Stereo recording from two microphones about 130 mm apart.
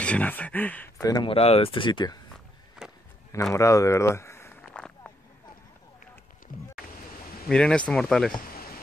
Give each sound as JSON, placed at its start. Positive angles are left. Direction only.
{"t": 0.0, "sound": "speech", "side_deg": 10}
{"t": 1.0, "sound": "speech", "side_deg": 30}
{"t": 1.3, "sound": "speech", "side_deg": 50}
{"t": 2.8, "sound": "a sound", "side_deg": -5}
{"t": 3.5, "sound": "speech", "side_deg": 25}
{"t": 4.7, "sound": "a sound", "side_deg": 5}
{"t": 7.4, "sound": "speech", "side_deg": 5}